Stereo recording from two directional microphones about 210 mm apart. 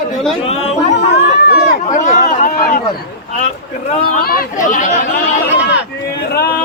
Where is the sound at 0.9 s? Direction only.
50° left (ahead or behind).